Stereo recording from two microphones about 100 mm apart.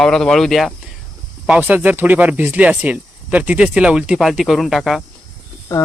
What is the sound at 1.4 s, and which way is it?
Speech, 15° right (ahead or behind).